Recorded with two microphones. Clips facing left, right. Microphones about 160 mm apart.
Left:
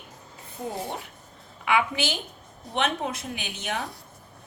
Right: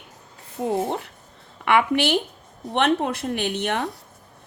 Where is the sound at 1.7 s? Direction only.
65° right (ahead or behind).